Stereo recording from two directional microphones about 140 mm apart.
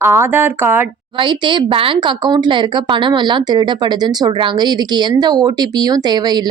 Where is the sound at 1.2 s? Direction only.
35° right (ahead or behind).